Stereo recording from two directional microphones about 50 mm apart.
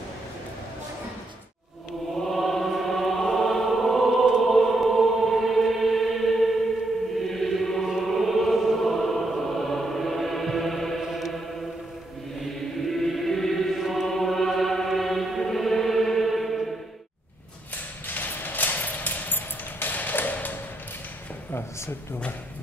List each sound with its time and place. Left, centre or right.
2.3 s choir: centre
4.5 s music: centre
8.1 s choir: centre
11.0 s chant: centre
12.4 s chant: centre
18.0 s a sound: left